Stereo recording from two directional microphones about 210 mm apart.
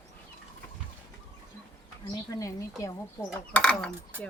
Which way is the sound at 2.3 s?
15° left (ahead or behind).